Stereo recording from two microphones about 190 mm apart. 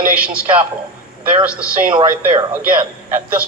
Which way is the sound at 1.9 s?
25° right (ahead or behind).